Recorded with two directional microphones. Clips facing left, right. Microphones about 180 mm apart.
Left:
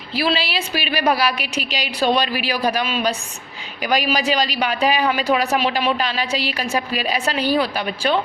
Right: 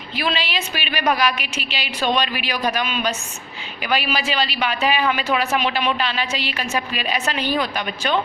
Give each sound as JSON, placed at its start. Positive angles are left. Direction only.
{"t": 0.2, "sound": "speech", "side_deg": 35}